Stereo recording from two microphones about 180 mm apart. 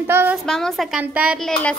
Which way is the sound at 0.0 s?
10° right (ahead or behind).